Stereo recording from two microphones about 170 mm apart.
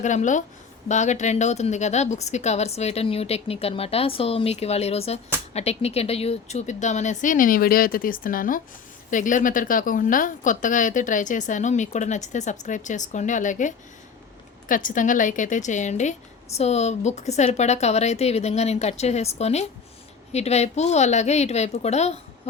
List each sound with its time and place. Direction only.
0.0 s a woman's voice: 45° left (ahead or behind)